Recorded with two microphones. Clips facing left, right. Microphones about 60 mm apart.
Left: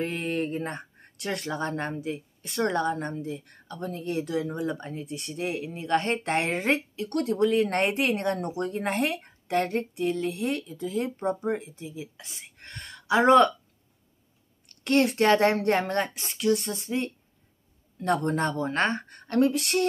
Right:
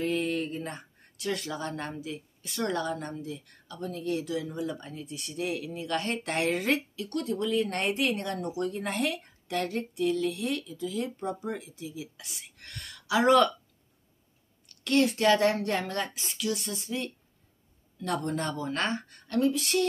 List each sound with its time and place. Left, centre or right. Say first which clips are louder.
0.0 s speech: even; left
7.1 s speech: left 6 dB; left
14.8 s speech: left 2 dB; left